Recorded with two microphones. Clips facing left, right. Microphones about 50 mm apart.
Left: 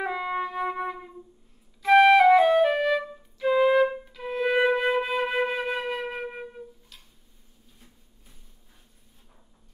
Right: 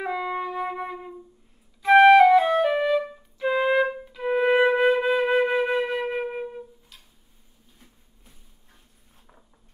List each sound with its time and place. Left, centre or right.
0.0 s music: centre
1.8 s flute: centre
4.1 s music: centre
4.8 s flute: centre